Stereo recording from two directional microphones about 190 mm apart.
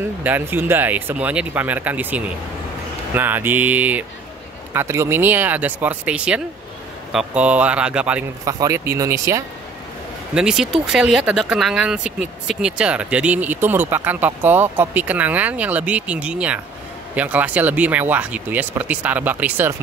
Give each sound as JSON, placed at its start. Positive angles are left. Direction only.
{"t": 0.0, "sound": "speech", "side_deg": -10}
{"t": 10.3, "sound": "speech", "side_deg": -5}